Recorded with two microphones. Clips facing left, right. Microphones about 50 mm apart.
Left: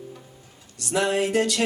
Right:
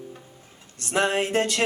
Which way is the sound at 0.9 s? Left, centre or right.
Right.